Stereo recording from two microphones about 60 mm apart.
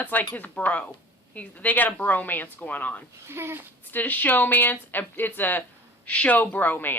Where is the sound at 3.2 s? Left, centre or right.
Right.